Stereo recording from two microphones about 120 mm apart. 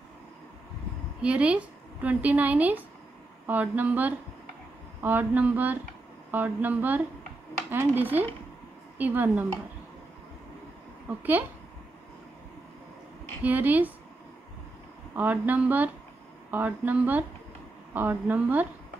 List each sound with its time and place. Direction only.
1.2 s a woman's voice: 10° right (ahead or behind)
13.4 s a woman's voice: 15° right (ahead or behind)
15.1 s a woman's voice: 15° right (ahead or behind)